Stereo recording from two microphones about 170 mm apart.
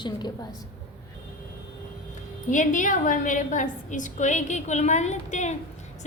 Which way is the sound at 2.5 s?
50° left (ahead or behind).